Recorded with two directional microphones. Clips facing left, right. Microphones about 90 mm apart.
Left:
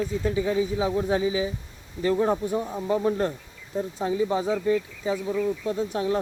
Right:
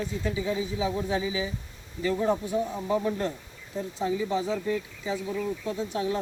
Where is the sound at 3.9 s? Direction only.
45° left (ahead or behind).